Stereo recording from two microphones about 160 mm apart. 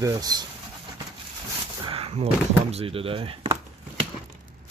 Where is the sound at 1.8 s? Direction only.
40° right (ahead or behind).